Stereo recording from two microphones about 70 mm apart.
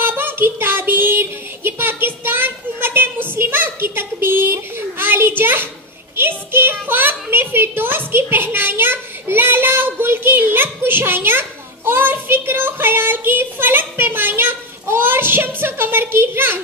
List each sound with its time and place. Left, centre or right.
0.0 s child singing: right
6.1 s a woman's voice: right